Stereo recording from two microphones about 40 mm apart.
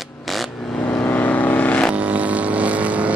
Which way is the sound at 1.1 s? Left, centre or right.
Left.